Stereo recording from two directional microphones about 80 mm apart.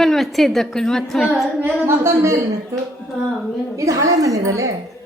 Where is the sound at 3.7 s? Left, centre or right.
Right.